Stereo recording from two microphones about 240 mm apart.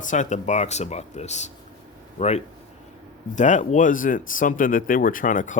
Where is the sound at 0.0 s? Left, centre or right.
Left.